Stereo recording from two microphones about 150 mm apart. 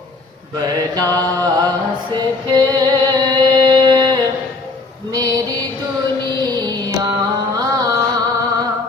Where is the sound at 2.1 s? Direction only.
25° right (ahead or behind).